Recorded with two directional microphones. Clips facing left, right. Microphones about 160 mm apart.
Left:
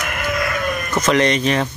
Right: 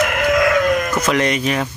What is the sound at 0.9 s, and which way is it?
Speech, 5° right (ahead or behind).